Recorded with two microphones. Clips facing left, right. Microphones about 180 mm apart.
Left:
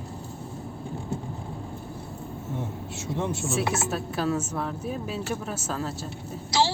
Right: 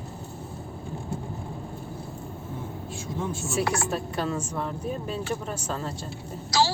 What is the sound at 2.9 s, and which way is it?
Speech, 75° left (ahead or behind).